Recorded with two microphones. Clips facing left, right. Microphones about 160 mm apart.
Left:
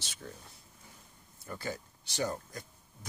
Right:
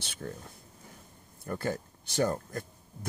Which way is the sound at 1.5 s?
55° right (ahead or behind).